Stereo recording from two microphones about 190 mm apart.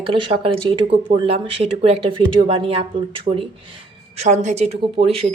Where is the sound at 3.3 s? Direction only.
40° right (ahead or behind).